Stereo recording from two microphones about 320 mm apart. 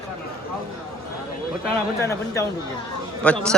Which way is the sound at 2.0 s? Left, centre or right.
Centre.